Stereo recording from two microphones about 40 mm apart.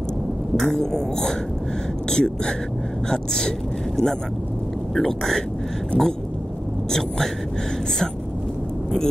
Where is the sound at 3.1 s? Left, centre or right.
Centre.